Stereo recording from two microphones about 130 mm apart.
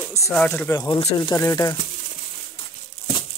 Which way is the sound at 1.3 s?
25° left (ahead or behind).